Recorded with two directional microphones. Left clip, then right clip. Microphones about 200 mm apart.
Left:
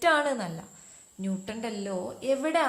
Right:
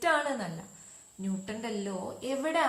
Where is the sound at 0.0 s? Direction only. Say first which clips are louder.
Left 4 dB; 45° left (ahead or behind).